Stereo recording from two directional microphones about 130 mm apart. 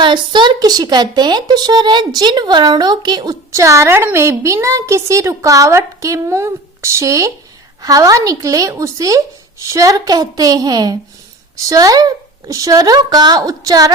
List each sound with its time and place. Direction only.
0.0 s a woman's voice: 35° right (ahead or behind)